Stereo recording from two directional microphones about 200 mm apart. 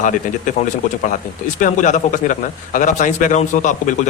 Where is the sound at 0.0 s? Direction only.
40° left (ahead or behind).